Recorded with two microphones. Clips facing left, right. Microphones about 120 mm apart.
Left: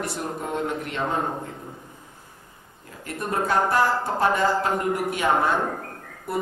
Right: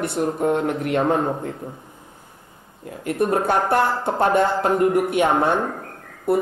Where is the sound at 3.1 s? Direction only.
60° right (ahead or behind).